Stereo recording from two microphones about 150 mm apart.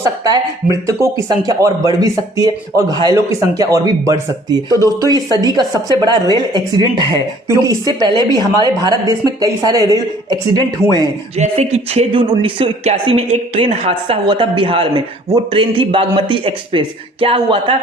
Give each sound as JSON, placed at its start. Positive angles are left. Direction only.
{"t": 0.0, "sound": "a woman's voice", "side_deg": -20}
{"t": 11.3, "sound": "speech", "side_deg": -50}